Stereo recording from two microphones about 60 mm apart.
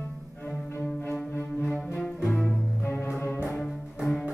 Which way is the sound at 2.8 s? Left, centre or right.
Left.